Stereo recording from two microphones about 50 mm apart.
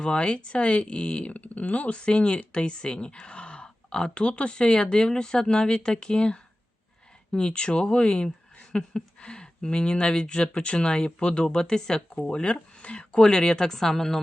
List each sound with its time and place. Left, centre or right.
0.0 s speech: left
8.7 s a sound: centre
9.6 s speech: centre